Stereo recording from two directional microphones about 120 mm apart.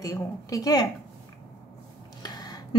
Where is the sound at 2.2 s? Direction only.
35° left (ahead or behind).